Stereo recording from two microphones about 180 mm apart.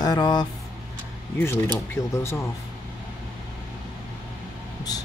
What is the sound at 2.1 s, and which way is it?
Speech, 15° left (ahead or behind).